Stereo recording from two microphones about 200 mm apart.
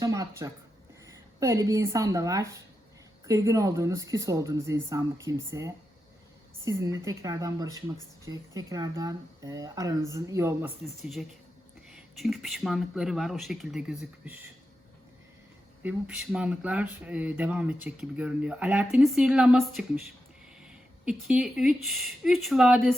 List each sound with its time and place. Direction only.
0.0 s a sound: 15° right (ahead or behind)
1.4 s speech: 15° right (ahead or behind)
11.0 s speech: centre (ahead or behind)
15.8 s speech: 5° right (ahead or behind)